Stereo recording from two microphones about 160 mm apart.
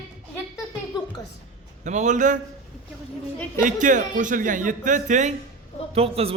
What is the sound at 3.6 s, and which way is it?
A man's voice, 55° right (ahead or behind).